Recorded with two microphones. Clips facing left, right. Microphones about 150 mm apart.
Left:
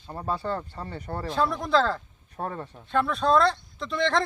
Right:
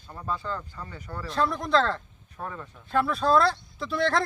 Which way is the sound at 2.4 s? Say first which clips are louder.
Left 4 dB; 35° left (ahead or behind).